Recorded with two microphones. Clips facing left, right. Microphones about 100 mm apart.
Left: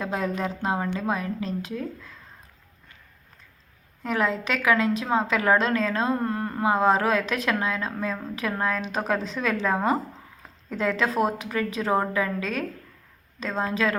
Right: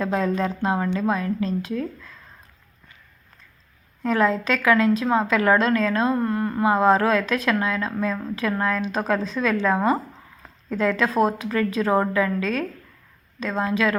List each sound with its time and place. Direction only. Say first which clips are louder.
0.0 s a woman's voice: right 5 dB; 15° left (ahead or behind)
4.0 s a woman's voice: right 5 dB; 15° left (ahead or behind)